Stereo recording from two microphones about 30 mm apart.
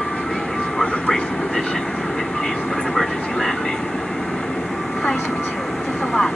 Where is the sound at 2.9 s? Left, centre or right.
Centre.